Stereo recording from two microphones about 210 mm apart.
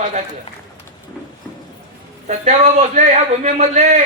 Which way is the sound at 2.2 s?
35° right (ahead or behind).